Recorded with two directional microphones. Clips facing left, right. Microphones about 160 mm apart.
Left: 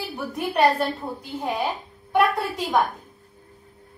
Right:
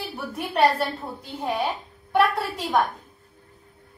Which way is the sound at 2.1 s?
Centre (ahead or behind).